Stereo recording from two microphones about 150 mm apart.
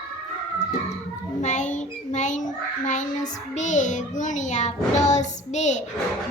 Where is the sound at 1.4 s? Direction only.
55° left (ahead or behind).